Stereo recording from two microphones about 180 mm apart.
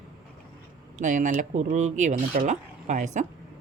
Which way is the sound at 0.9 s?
45° right (ahead or behind).